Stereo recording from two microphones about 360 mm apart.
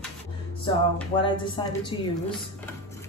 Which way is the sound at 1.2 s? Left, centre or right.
Centre.